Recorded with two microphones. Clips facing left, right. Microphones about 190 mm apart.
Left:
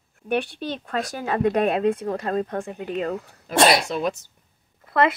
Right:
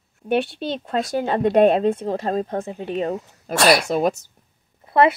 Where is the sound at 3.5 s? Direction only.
25° left (ahead or behind).